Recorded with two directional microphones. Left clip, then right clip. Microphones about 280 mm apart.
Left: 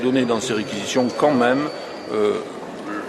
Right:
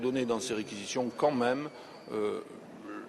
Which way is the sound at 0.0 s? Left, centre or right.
Left.